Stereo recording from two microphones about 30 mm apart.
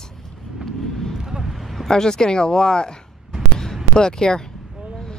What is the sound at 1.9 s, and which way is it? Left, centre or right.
Speech, left.